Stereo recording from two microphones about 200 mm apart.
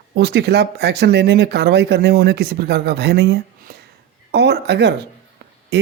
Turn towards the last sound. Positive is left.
turn(degrees=-55)  # may be behind; listen again after turning